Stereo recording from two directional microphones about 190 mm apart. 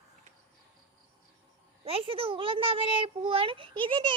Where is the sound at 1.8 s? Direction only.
30° right (ahead or behind).